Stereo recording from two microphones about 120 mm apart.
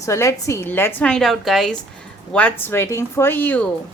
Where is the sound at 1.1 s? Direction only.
Centre (ahead or behind).